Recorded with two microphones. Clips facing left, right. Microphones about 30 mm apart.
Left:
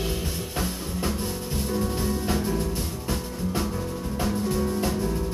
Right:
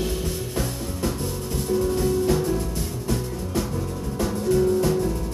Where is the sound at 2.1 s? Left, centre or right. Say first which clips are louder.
Right 5 dB; centre.